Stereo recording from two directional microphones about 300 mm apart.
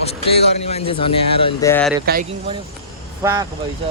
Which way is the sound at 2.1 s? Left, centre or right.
Right.